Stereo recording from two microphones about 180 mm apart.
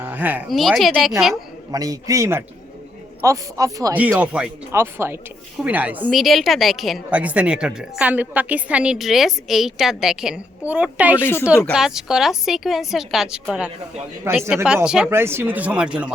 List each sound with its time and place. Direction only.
0.0 s a woman's voice: 10° right (ahead or behind)
1.7 s speech: 20° right (ahead or behind)
3.9 s a woman's voice: 10° right (ahead or behind)